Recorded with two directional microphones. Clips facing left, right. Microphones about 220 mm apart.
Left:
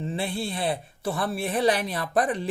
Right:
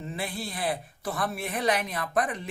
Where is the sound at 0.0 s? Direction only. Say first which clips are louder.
Left 5 dB; 30° left (ahead or behind).